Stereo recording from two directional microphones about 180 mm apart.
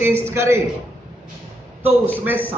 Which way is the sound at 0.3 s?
15° right (ahead or behind).